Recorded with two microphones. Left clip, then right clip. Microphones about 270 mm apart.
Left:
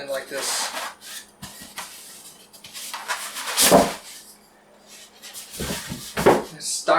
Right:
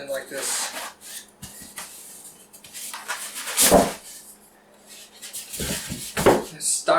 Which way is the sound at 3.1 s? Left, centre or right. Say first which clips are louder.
Left 3 dB; centre.